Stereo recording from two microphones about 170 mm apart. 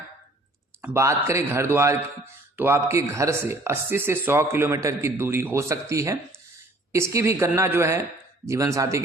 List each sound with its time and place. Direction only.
0.8 s speech: 15° right (ahead or behind)